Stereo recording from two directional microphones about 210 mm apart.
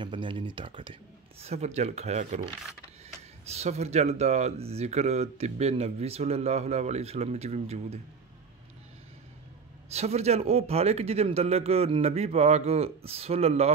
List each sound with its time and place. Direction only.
0.0 s speech: 25° right (ahead or behind)
3.4 s speech: 30° right (ahead or behind)
9.9 s speech: 30° right (ahead or behind)